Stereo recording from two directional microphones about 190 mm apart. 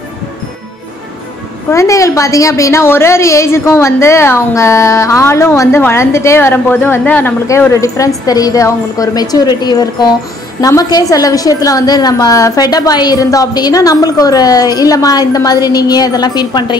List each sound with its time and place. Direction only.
1.7 s a woman's voice: 15° left (ahead or behind)